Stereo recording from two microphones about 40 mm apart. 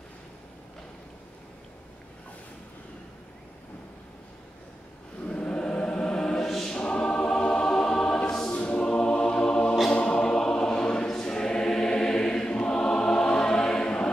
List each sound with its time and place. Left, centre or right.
5.2 s choir: left
8.5 s music: left
9.8 s choir: left